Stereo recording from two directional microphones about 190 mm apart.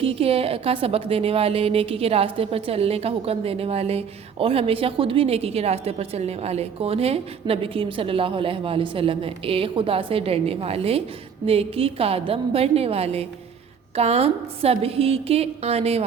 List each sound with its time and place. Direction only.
0.0 s a woman's voice: 30° right (ahead or behind)